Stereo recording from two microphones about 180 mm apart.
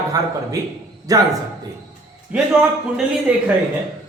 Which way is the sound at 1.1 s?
20° right (ahead or behind).